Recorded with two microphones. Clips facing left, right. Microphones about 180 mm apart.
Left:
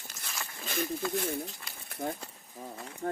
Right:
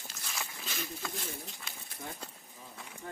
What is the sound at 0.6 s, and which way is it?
Snake, 50° left (ahead or behind).